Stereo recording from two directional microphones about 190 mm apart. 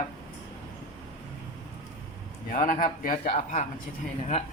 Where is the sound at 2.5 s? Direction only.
40° left (ahead or behind).